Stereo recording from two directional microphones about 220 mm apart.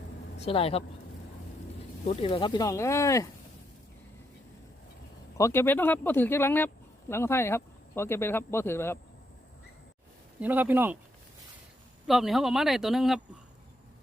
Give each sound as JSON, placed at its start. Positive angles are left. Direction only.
{"t": 0.4, "sound": "speech", "side_deg": 25}
{"t": 2.0, "sound": "speech", "side_deg": 25}
{"t": 5.4, "sound": "speech", "side_deg": 10}
{"t": 10.4, "sound": "speech", "side_deg": -10}
{"t": 12.0, "sound": "speech", "side_deg": 0}